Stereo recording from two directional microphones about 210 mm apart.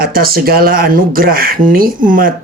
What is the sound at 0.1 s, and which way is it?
Speech, 45° right (ahead or behind).